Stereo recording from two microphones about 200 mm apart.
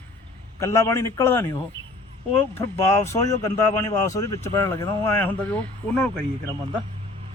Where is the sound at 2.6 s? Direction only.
15° left (ahead or behind).